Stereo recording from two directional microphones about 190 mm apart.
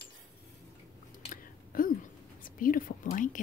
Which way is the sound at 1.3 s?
45° left (ahead or behind).